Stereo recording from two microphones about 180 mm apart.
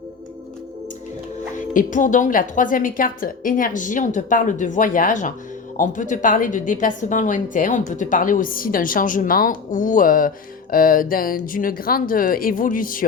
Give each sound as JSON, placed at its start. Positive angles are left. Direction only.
{"t": 1.5, "sound": "a woman's voice", "side_deg": 45}